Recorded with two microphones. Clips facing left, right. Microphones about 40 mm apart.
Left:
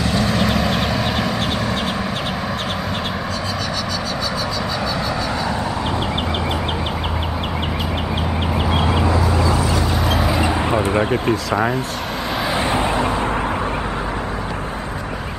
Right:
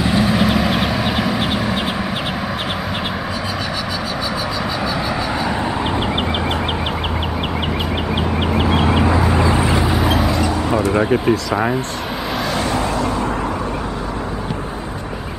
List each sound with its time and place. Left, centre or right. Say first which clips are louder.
0.0 s vehicle: right 3 dB; centre
8.5 s a sound: right 3 dB; centre
9.3 s vehicle: right 2 dB; right
10.0 s vehicle: right 2 dB; centre
10.3 s a sound: even; centre
10.9 s speech: right 2 dB; centre
12.5 s vehicle: left 2 dB; left